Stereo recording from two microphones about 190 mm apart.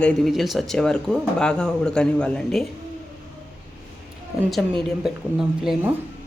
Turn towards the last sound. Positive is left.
turn(degrees=0)  # may be behind; listen again after turning